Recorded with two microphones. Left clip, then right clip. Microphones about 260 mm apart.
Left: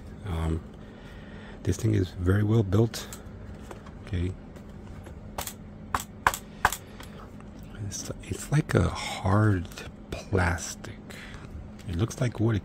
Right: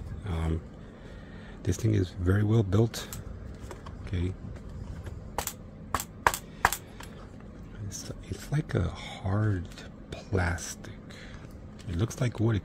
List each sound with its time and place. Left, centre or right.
0.3 s a sound: centre
1.8 s speech: centre
4.1 s speech: centre
5.9 s coin: centre
8.1 s speech: centre
11.9 s speech: centre